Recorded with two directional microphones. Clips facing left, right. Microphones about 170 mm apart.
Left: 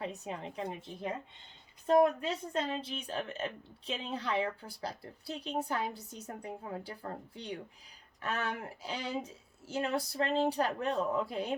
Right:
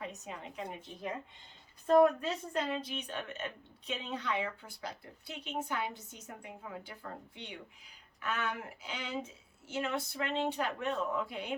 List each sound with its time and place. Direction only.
0.0 s a woman's voice: 30° left (ahead or behind)
2.2 s a woman's voice: 30° left (ahead or behind)